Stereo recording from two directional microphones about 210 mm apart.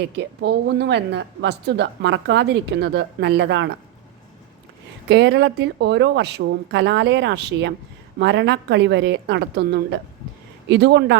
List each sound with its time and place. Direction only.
0.0 s a woman's voice: 55° right (ahead or behind)
5.0 s a woman's voice: 55° right (ahead or behind)